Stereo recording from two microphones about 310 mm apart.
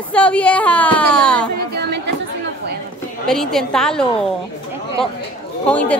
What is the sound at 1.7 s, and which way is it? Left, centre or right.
Chatter, right.